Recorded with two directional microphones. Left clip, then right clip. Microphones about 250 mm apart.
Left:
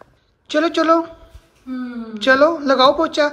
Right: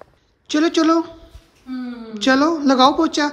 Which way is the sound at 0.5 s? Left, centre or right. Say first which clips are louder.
Left 1 dB; centre.